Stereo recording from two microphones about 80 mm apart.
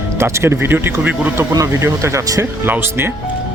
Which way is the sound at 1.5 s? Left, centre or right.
Right.